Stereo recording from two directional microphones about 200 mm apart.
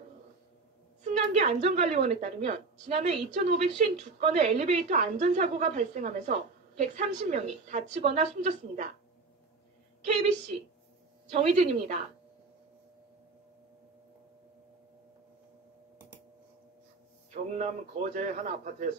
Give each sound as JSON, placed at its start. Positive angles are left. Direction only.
{"t": 1.0, "sound": "a woman's voice", "side_deg": -35}
{"t": 11.2, "sound": "a woman's voice", "side_deg": -30}
{"t": 17.3, "sound": "a woman's voice", "side_deg": -35}